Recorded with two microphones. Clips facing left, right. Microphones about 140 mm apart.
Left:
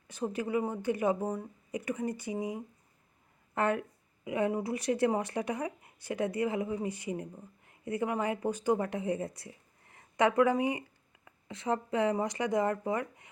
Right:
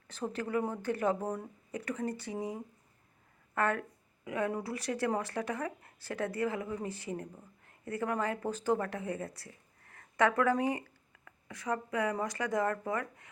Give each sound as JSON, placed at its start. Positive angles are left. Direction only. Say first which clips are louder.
{"t": 0.1, "sound": "speech", "louder": "left 2 dB", "side_deg": 10}